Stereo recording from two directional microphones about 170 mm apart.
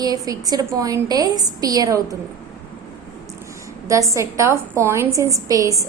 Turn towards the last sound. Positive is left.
turn(degrees=-20)  # may be behind; listen again after turning